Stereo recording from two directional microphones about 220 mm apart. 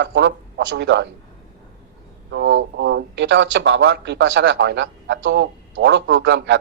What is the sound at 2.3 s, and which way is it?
Speech, 55° right (ahead or behind).